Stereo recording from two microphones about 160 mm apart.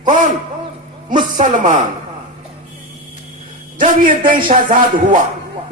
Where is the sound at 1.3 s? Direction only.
55° right (ahead or behind).